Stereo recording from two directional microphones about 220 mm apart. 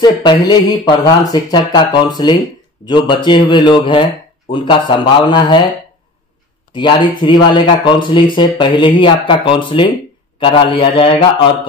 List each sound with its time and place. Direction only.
0.0 s speech: 20° left (ahead or behind)
6.7 s speech: 20° left (ahead or behind)